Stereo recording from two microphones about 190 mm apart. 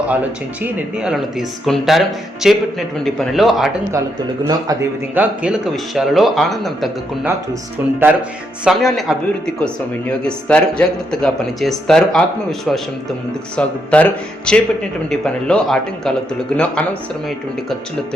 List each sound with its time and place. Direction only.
0.1 s speech: 10° right (ahead or behind)
4.4 s a man's voice: 20° right (ahead or behind)
5.2 s speech: 5° right (ahead or behind)
7.8 s speech: 10° right (ahead or behind)
8.6 s speech: centre (ahead or behind)
10.2 s speech: 5° left (ahead or behind)